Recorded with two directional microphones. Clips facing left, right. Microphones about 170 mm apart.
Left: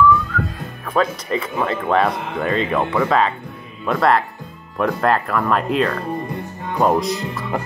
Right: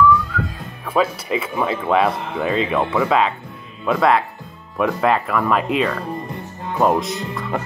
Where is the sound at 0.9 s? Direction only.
5° right (ahead or behind).